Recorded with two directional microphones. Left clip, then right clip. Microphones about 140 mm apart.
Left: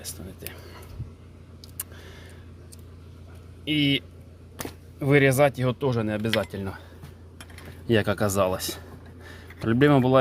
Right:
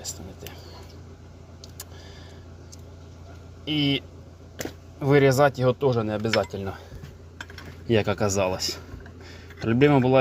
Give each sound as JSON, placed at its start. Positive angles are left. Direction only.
{"t": 3.7, "sound": "speech", "side_deg": 25}
{"t": 7.9, "sound": "speech", "side_deg": 20}